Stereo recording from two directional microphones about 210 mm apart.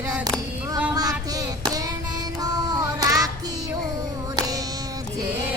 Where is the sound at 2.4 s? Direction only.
20° right (ahead or behind).